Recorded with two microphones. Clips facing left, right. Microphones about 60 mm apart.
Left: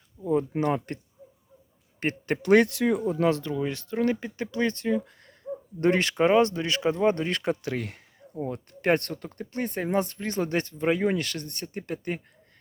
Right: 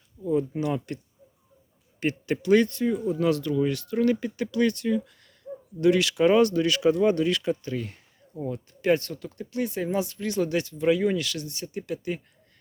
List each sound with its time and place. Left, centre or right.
0.2 s a sound: left
0.9 s speech: left
2.6 s speech: left
3.0 s speech: left
6.3 s speech: left
7.5 s speech: left
8.4 s speech: left